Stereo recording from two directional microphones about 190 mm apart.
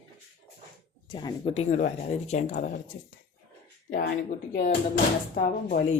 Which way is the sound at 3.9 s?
50° left (ahead or behind).